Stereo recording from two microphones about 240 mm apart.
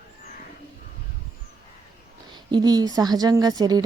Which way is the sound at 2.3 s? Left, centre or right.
Centre.